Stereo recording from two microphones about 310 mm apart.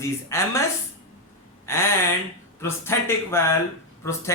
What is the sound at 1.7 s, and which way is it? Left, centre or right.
A man's voice, centre.